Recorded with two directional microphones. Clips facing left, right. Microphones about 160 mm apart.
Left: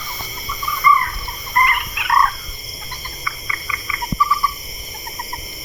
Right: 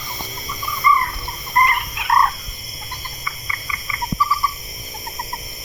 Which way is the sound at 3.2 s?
25° right (ahead or behind).